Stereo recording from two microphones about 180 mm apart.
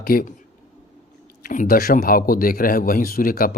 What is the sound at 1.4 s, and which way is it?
A man's voice, 50° left (ahead or behind).